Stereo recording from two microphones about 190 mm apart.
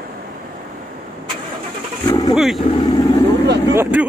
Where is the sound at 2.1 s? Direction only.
20° left (ahead or behind).